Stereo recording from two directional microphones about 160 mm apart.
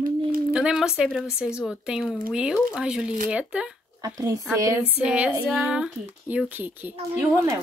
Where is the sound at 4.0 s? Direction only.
25° right (ahead or behind).